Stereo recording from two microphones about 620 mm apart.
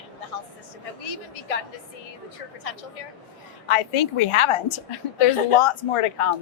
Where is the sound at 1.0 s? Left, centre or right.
Left.